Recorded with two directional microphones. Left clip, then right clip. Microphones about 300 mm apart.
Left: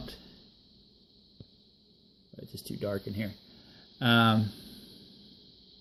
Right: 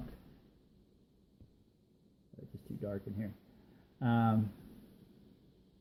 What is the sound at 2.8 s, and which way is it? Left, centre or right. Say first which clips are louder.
Speech: left 8 dB; left.